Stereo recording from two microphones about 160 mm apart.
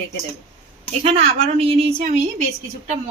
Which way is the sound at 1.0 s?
35° right (ahead or behind).